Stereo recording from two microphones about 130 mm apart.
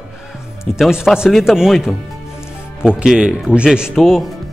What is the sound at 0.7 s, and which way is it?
Speech, 5° right (ahead or behind).